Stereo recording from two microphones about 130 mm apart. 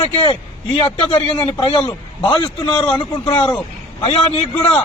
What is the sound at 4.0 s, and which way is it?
Speech, 45° left (ahead or behind).